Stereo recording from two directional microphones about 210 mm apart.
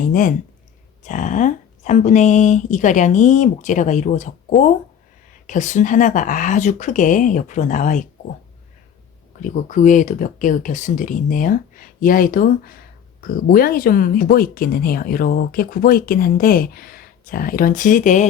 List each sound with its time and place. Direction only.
0.1 s speech: 40° left (ahead or behind)
9.4 s speech: 35° left (ahead or behind)